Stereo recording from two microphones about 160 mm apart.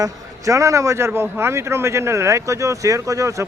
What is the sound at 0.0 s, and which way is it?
A man's voice, 20° right (ahead or behind).